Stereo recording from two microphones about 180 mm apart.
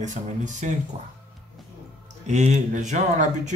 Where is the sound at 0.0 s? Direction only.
40° right (ahead or behind).